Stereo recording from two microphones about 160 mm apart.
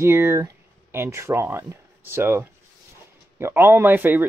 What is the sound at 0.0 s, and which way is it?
Speech, 15° right (ahead or behind).